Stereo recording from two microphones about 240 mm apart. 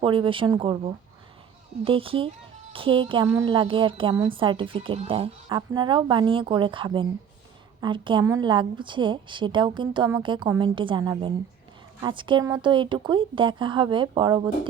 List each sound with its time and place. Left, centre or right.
0.0 s a woman's voice: right